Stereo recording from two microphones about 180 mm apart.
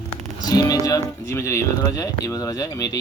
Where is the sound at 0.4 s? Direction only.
20° left (ahead or behind).